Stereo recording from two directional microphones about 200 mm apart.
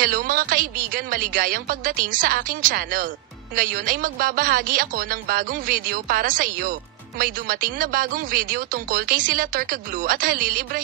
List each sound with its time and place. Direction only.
0.0 s a woman's voice: 45° right (ahead or behind)